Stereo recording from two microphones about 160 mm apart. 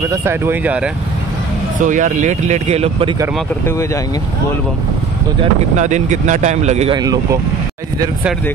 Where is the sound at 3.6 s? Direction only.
20° left (ahead or behind).